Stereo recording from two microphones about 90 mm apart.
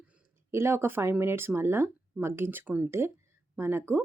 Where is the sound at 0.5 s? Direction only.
30° right (ahead or behind).